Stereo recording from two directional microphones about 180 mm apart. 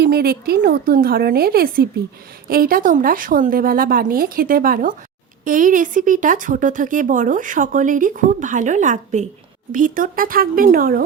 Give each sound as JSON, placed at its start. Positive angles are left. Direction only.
{"t": 0.0, "sound": "speech", "side_deg": -60}